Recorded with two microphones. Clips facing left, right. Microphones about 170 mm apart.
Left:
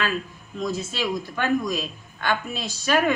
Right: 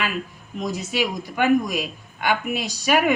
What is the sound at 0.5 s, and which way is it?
A man's voice, 15° right (ahead or behind).